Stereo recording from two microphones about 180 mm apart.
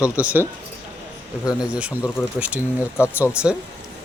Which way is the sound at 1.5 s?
5° right (ahead or behind).